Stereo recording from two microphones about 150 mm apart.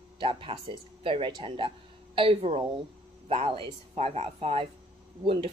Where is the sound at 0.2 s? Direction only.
35° right (ahead or behind).